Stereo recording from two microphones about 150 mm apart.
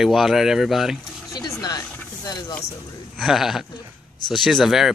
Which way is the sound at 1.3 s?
25° left (ahead or behind).